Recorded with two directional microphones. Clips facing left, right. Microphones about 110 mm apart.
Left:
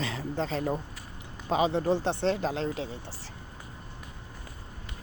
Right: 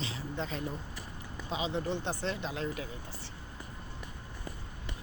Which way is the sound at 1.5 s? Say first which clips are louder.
Left 10 dB; 50° left (ahead or behind).